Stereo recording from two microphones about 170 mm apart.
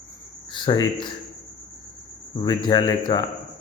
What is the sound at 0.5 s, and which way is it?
Speech, 25° left (ahead or behind).